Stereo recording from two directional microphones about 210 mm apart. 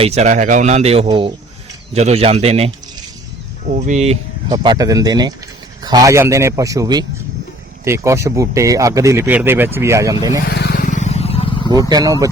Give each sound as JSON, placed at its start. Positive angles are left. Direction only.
{"t": 0.0, "sound": "speech", "side_deg": -30}
{"t": 4.4, "sound": "speech", "side_deg": -20}
{"t": 10.4, "sound": "vehicle", "side_deg": 50}
{"t": 11.7, "sound": "speech", "side_deg": -20}